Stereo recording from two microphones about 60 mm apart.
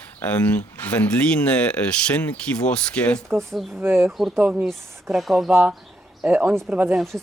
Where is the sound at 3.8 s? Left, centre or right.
Right.